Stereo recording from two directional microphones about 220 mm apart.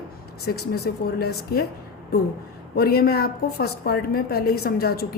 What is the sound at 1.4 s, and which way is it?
Speech, 45° left (ahead or behind).